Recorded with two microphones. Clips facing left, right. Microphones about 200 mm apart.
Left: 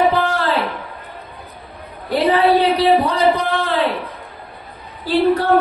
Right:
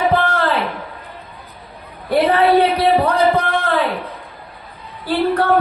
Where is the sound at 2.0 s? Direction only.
55° right (ahead or behind).